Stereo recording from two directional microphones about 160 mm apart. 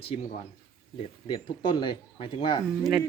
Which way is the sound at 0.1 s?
40° left (ahead or behind).